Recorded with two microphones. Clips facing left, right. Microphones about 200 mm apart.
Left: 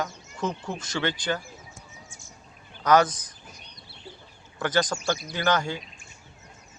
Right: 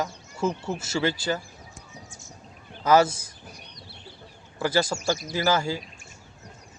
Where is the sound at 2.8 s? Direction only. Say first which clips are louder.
Right 1 dB; 5° right (ahead or behind).